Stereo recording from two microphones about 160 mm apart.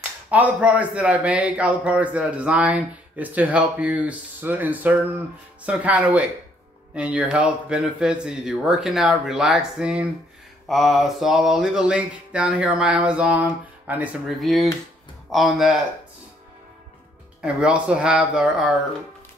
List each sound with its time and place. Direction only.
0.3 s a man's voice: 10° right (ahead or behind)
6.9 s mantra: 10° right (ahead or behind)
17.4 s mantra: 5° right (ahead or behind)